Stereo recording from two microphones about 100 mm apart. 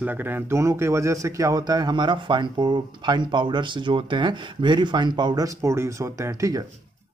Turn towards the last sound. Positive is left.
turn(degrees=-35)  # may be behind; listen again after turning